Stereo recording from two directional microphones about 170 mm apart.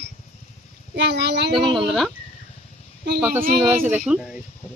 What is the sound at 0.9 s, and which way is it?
Speech, 75° right (ahead or behind).